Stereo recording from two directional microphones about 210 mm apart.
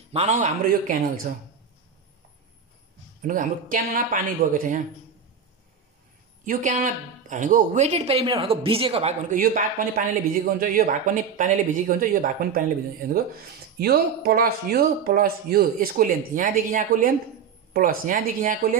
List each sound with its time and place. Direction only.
0.1 s speech: 30° right (ahead or behind)
3.2 s speech: 40° right (ahead or behind)
6.4 s speech: 40° right (ahead or behind)
9.3 s speech: 40° right (ahead or behind)
13.7 s speech: 45° right (ahead or behind)